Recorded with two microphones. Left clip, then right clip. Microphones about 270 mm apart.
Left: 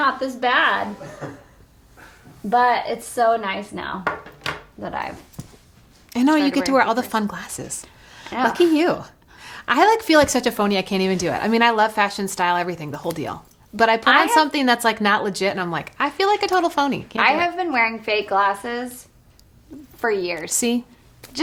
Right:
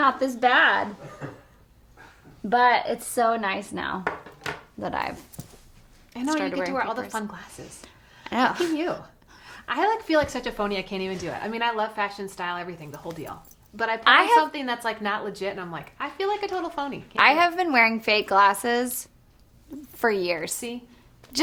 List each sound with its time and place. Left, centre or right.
0.0 s a woman's voice: right
2.5 s a woman's voice: right
6.1 s a woman's voice: left
8.2 s speech: right
8.7 s a woman's voice: left
14.0 s a woman's voice: right
14.3 s a woman's voice: left
17.2 s a woman's voice: right
20.0 s a woman's voice: right
20.6 s a woman's voice: left